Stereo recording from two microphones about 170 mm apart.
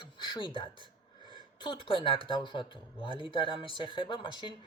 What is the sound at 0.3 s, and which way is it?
Speech, 30° left (ahead or behind).